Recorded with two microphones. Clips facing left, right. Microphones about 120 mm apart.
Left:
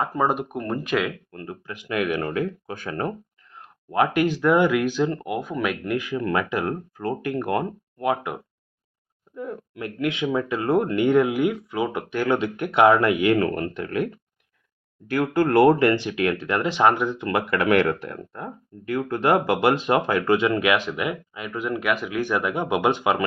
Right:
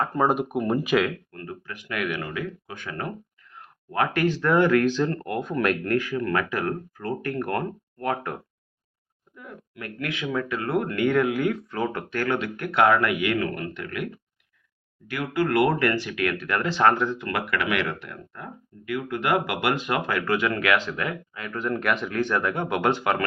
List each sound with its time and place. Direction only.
0.0 s speech: centre (ahead or behind)
1.3 s speech: 25° left (ahead or behind)
3.5 s a sound: 30° left (ahead or behind)
4.0 s speech: 15° left (ahead or behind)
9.3 s speech: 35° left (ahead or behind)
9.8 s speech: 20° left (ahead or behind)
17.6 s speech: 40° left (ahead or behind); by 23.2 s 15° left (ahead or behind)